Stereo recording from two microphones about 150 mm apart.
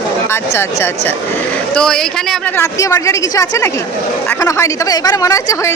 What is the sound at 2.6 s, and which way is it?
A woman's voice, 20° left (ahead or behind).